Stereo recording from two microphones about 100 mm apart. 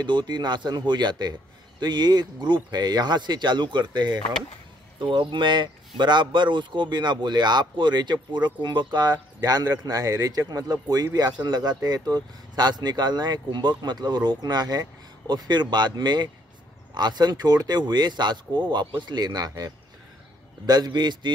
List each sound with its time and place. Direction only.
0.0 s speech: 50° right (ahead or behind)
4.9 s speech: 55° right (ahead or behind)